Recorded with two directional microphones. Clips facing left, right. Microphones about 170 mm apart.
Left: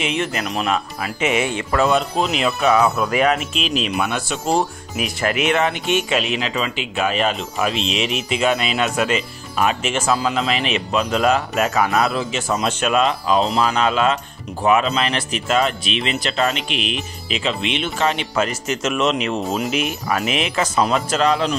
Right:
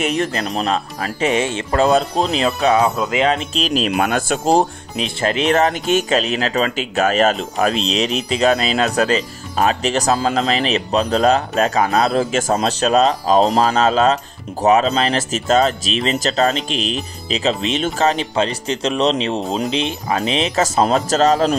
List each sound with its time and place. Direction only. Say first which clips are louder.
0.0 s speech: right 3 dB; 40° right (ahead or behind)
4.9 s speech: right 2 dB; 25° right (ahead or behind)